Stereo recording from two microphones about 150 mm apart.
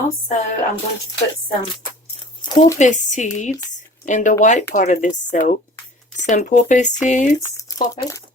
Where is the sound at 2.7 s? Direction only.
55° left (ahead or behind).